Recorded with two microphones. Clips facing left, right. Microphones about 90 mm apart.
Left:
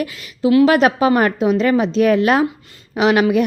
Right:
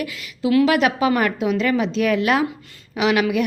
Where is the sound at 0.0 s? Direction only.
35° left (ahead or behind).